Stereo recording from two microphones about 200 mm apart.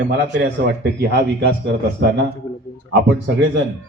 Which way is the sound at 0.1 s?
55° right (ahead or behind).